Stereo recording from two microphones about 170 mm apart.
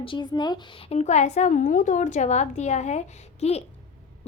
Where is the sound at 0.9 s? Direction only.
40° left (ahead or behind).